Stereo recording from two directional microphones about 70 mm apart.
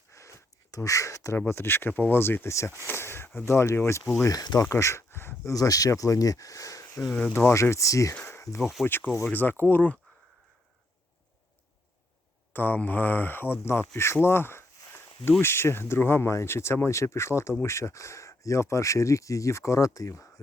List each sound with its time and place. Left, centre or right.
0.1 s a sound: left
1.5 s speech: left
4.3 s speech: left
4.6 s a sound: left
5.5 s speech: left
8.3 s insect: left
8.8 s speech: left
12.5 s speech: left